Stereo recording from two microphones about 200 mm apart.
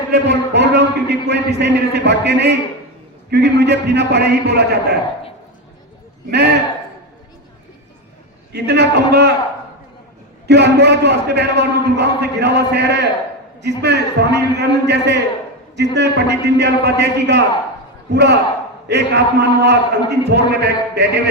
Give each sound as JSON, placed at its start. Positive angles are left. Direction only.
{"t": 0.1, "sound": "a man's voice", "side_deg": -60}
{"t": 6.3, "sound": "a man's voice", "side_deg": -55}
{"t": 8.5, "sound": "a man's voice", "side_deg": -55}
{"t": 10.4, "sound": "a man's voice", "side_deg": -60}